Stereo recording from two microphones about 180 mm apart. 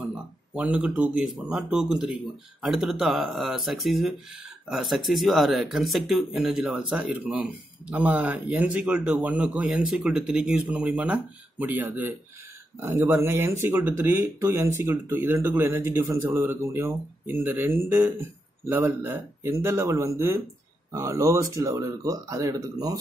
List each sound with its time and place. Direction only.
0.6 s speech: 5° right (ahead or behind)